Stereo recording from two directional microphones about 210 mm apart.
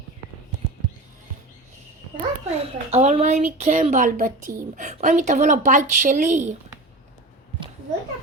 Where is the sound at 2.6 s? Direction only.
30° right (ahead or behind).